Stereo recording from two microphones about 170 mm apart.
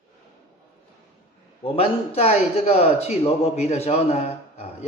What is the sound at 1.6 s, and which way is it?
A man's voice, 35° left (ahead or behind).